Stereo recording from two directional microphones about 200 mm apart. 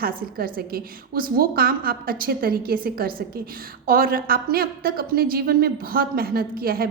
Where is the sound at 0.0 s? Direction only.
50° right (ahead or behind).